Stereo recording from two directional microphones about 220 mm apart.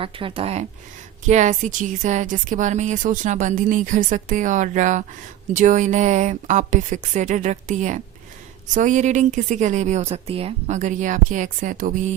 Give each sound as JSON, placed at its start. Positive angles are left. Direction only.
{"t": 0.0, "sound": "speech", "side_deg": -25}